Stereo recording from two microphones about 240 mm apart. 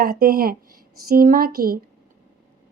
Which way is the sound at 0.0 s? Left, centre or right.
Right.